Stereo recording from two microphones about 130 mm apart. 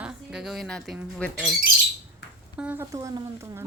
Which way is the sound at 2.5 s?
10° right (ahead or behind).